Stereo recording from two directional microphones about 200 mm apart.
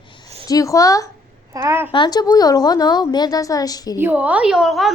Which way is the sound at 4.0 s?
10° right (ahead or behind).